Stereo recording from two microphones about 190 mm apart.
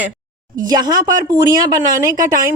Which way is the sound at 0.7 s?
20° right (ahead or behind).